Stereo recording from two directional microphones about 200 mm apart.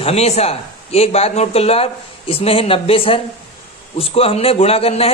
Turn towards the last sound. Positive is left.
turn(degrees=30)  # may be behind; listen again after turning